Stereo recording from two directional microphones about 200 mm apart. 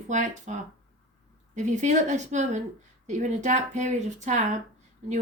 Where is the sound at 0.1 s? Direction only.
35° right (ahead or behind).